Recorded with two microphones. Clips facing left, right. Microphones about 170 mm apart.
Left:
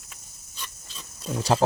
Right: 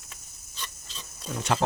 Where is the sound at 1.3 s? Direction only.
30° left (ahead or behind).